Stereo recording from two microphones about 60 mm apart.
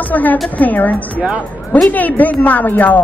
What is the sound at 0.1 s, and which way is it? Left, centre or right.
Speech, left.